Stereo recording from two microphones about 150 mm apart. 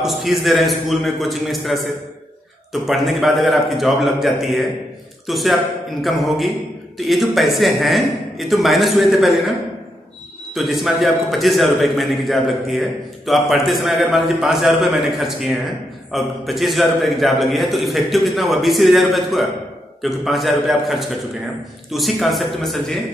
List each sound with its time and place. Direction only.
0.0 s a man's voice: centre (ahead or behind)
10.5 s a man's voice: centre (ahead or behind)